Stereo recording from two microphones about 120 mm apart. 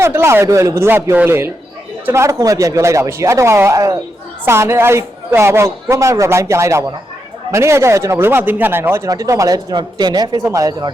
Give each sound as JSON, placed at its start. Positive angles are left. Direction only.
{"t": 0.0, "sound": "speech", "side_deg": -20}
{"t": 9.0, "sound": "speech", "side_deg": -30}